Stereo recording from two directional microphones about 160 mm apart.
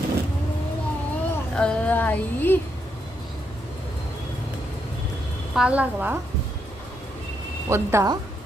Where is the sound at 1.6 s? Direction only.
10° left (ahead or behind).